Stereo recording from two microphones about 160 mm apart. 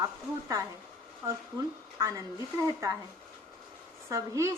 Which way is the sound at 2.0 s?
20° right (ahead or behind).